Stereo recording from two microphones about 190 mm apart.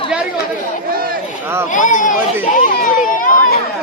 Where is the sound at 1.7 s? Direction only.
40° left (ahead or behind).